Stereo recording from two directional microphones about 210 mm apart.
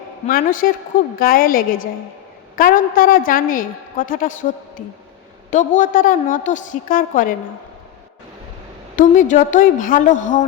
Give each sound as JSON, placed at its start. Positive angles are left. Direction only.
{"t": 0.3, "sound": "a woman's voice", "side_deg": 40}
{"t": 9.0, "sound": "a woman's voice", "side_deg": 40}